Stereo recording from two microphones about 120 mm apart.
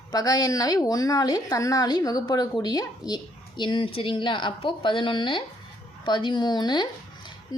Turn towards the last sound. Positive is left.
turn(degrees=35)  # may be behind; listen again after turning